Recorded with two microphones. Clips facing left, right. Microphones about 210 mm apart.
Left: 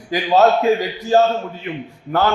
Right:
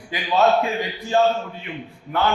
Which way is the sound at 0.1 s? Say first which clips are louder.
Left 6 dB; 40° left (ahead or behind).